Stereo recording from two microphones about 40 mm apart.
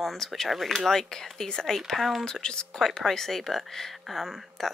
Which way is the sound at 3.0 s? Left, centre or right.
Centre.